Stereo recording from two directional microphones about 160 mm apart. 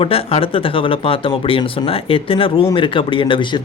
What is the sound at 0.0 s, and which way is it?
Speech, 35° left (ahead or behind).